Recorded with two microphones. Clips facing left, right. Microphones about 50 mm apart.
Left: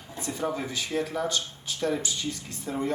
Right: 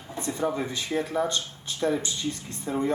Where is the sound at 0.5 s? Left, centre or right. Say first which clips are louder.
Right 1 dB; right.